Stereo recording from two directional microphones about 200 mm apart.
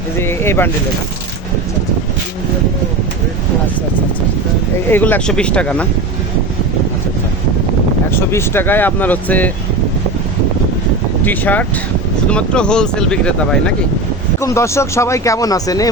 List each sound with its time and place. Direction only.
0.2 s speech: 10° left (ahead or behind)
4.9 s speech: 10° left (ahead or behind)
8.1 s speech: 10° left (ahead or behind)
11.3 s speech: 10° left (ahead or behind)